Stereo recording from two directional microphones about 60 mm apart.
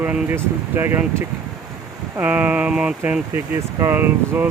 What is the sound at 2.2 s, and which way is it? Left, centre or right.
Speech, right.